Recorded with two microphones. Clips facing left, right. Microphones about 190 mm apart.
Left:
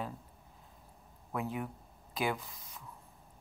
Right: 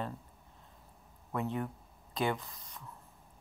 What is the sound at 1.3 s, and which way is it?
Speech, 5° left (ahead or behind).